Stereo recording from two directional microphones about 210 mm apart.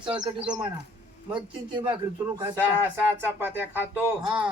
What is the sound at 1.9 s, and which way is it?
Speech, 10° right (ahead or behind).